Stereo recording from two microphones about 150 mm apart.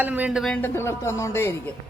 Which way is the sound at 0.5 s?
15° left (ahead or behind).